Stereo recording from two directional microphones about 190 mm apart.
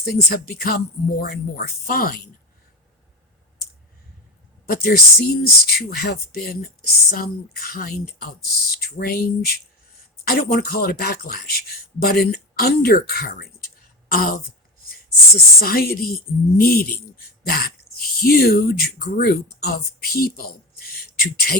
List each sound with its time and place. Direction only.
0.0 s speech: 50° left (ahead or behind)
4.7 s speech: 55° left (ahead or behind)
15.6 s speech: 50° left (ahead or behind)